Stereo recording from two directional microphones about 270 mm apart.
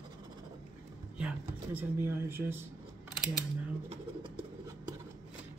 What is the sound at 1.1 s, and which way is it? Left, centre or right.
Speech, centre.